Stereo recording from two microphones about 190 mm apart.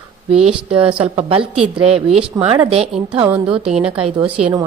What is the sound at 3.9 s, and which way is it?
Speech, 30° right (ahead or behind).